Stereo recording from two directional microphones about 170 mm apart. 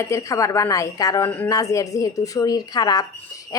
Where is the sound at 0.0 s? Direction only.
20° left (ahead or behind).